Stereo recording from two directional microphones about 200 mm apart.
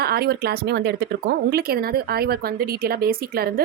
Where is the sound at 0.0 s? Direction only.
50° right (ahead or behind).